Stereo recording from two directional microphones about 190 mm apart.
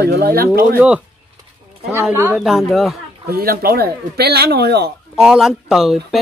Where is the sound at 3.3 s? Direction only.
50° right (ahead or behind).